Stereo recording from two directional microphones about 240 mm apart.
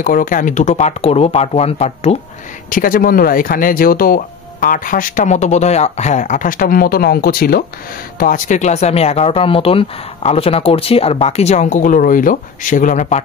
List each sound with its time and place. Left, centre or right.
0.0 s speech: left
2.7 s speech: left